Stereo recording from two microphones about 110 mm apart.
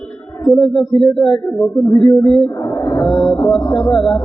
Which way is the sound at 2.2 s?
50° left (ahead or behind).